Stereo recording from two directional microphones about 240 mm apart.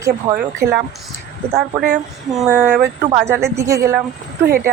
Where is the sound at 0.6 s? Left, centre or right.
Right.